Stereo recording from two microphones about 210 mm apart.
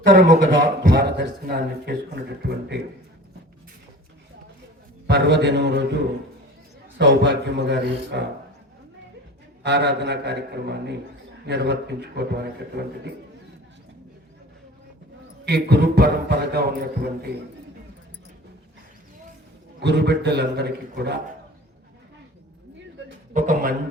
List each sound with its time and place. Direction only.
0.4 s a man's voice: 55° right (ahead or behind)
5.0 s a man's voice: 55° right (ahead or behind)
7.0 s speech: 55° right (ahead or behind)
9.6 s a man's voice: 55° right (ahead or behind)
15.4 s a man's voice: 50° right (ahead or behind)
19.8 s a man's voice: 55° right (ahead or behind)
23.3 s a man's voice: 40° right (ahead or behind)